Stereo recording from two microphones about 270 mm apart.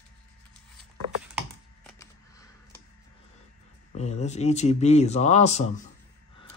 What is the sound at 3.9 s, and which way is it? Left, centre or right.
A man's voice, left.